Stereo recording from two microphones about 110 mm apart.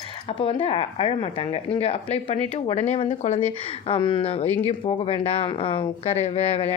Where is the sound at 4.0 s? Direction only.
45° left (ahead or behind).